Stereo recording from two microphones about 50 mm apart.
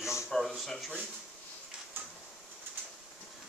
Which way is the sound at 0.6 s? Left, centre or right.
Centre.